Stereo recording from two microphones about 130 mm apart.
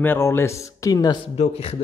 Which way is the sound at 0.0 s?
15° left (ahead or behind).